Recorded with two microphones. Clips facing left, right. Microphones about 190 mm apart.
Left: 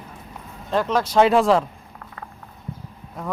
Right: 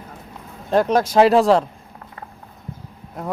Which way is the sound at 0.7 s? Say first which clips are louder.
Right 4 dB; 45° right (ahead or behind).